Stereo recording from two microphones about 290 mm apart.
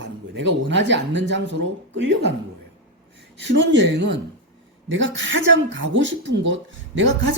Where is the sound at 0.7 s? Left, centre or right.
Right.